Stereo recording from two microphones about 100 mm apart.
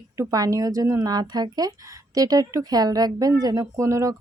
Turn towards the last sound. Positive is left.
turn(degrees=-30)  # may be behind; listen again after turning